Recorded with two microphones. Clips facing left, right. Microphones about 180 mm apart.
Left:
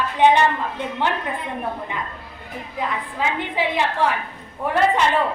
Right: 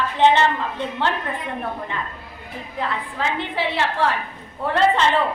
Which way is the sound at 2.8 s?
15° left (ahead or behind).